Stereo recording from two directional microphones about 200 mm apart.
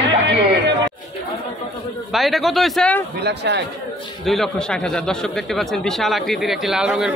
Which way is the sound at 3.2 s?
55° right (ahead or behind).